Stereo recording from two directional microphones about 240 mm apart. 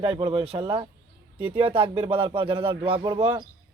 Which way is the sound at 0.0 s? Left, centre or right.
Right.